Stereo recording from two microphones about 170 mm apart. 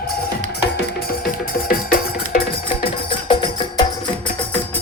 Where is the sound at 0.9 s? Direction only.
60° left (ahead or behind).